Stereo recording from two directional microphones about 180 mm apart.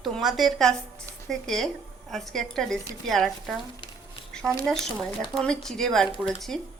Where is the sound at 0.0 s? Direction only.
Centre (ahead or behind).